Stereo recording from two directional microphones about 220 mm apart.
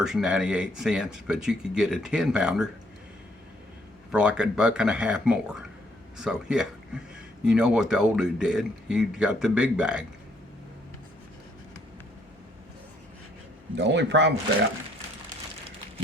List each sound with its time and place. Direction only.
0.0 s speech: 5° right (ahead or behind)
4.1 s a man's voice: 5° right (ahead or behind)
13.7 s a man's voice: 55° right (ahead or behind)